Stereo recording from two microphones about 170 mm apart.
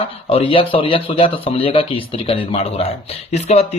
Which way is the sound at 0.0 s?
35° left (ahead or behind).